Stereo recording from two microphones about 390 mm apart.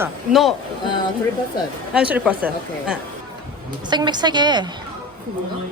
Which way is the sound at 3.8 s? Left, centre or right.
Centre.